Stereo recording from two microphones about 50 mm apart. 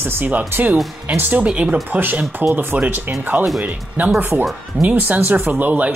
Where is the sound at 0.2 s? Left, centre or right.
Right.